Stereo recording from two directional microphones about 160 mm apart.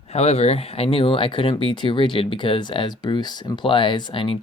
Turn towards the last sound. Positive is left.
turn(degrees=30)  # may be behind; listen again after turning